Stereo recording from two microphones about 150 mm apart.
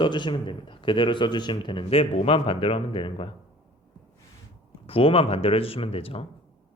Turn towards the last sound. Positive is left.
turn(degrees=40)  # may be behind; listen again after turning